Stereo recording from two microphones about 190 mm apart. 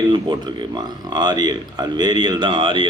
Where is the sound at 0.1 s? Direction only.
25° right (ahead or behind).